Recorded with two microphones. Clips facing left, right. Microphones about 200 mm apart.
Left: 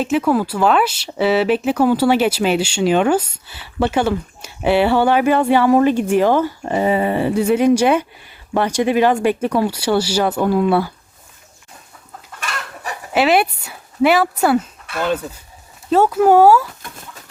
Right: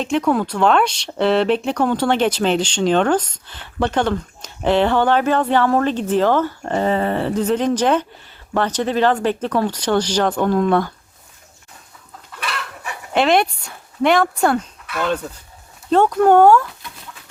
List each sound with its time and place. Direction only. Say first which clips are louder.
0.0 s speech: left 2 dB; 5° left (ahead or behind)
12.3 s chicken: right 1 dB; 45° left (ahead or behind)
13.1 s speech: left 1 dB; 5° left (ahead or behind)
16.8 s a sound: left 2 dB; 50° left (ahead or behind)